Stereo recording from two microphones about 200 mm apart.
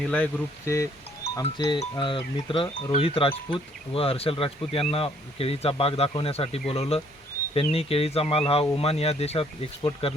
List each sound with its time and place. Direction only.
0.0 s speech: 5° left (ahead or behind); by 10.2 s 30° left (ahead or behind)